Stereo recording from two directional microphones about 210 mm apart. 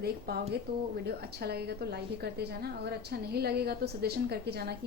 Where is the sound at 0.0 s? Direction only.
50° right (ahead or behind).